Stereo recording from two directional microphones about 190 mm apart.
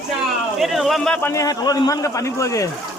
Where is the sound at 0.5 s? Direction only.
Centre (ahead or behind); by 2.7 s 15° left (ahead or behind).